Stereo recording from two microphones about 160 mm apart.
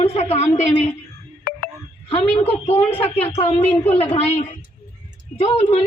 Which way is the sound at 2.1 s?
40° left (ahead or behind).